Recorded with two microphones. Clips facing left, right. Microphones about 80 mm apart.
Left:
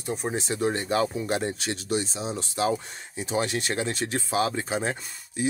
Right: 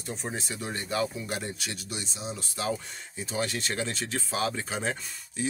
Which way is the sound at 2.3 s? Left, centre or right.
Left.